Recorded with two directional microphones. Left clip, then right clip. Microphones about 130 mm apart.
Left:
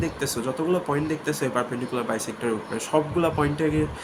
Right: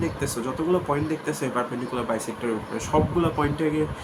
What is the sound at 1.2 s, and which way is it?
Speech, 35° left (ahead or behind).